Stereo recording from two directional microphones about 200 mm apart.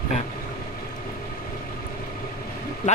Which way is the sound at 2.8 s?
40° left (ahead or behind).